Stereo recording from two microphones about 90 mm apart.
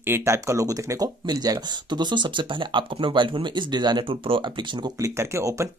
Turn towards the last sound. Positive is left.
turn(degrees=-30)  # may be behind; listen again after turning